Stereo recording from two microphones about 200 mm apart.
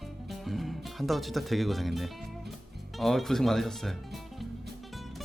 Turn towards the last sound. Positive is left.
turn(degrees=0)  # may be behind; listen again after turning